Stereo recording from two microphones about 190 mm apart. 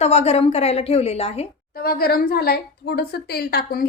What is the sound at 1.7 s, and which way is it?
A woman's voice, 50° left (ahead or behind).